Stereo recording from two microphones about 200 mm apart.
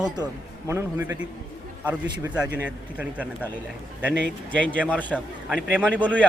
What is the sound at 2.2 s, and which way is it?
Speech, 5° right (ahead or behind).